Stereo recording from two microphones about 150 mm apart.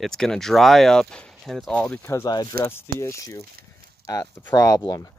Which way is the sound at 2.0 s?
20° left (ahead or behind).